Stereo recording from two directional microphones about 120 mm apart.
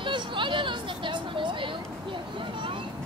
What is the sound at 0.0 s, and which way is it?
Vehicle, 40° right (ahead or behind).